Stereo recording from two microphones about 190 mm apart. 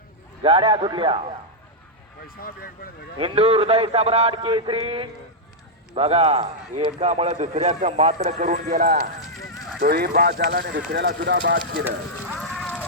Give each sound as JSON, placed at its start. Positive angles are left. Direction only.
{"t": 0.4, "sound": "speech", "side_deg": -30}
{"t": 3.2, "sound": "a man's voice", "side_deg": -30}
{"t": 9.2, "sound": "horse", "side_deg": 0}
{"t": 9.8, "sound": "speech", "side_deg": -50}
{"t": 11.9, "sound": "a sound", "side_deg": -5}
{"t": 12.5, "sound": "music", "side_deg": 5}